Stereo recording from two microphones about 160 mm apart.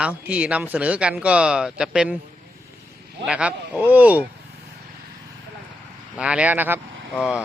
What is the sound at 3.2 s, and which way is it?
Speech, 5° right (ahead or behind).